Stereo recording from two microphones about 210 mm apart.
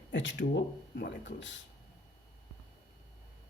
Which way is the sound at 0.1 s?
60° left (ahead or behind).